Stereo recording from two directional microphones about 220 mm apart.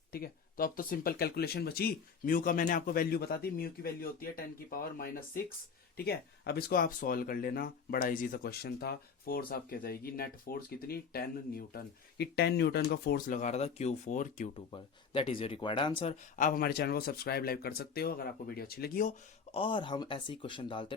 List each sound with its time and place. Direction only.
0.1 s speech: 40° left (ahead or behind); by 16.1 s 20° left (ahead or behind)
16.4 s speech: 40° left (ahead or behind)
19.5 s speech: 20° left (ahead or behind)